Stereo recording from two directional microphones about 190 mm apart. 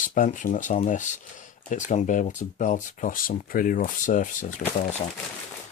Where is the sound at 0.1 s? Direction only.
45° left (ahead or behind).